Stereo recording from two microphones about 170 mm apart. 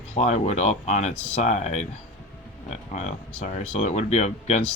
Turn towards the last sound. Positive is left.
turn(degrees=45)  # may be behind; listen again after turning